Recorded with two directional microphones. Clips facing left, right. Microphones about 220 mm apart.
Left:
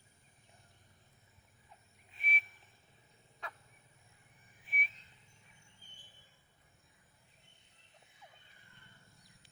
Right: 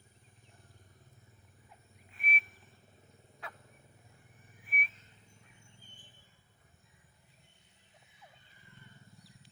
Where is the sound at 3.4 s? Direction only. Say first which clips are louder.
Even; 5° right (ahead or behind).